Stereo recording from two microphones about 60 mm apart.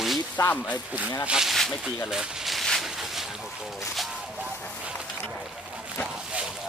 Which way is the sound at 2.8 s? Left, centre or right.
Centre.